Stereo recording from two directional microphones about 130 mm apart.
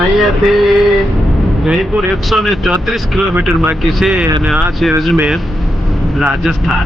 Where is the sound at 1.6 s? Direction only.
Centre (ahead or behind).